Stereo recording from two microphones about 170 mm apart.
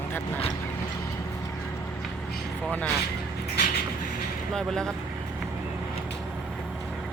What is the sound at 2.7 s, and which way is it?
Speech, 5° left (ahead or behind).